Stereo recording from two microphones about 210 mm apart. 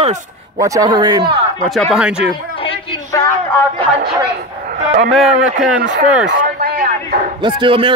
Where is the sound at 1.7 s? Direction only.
Centre (ahead or behind).